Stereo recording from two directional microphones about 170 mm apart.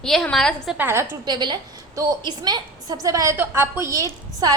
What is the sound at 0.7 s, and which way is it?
A woman's voice, 15° right (ahead or behind).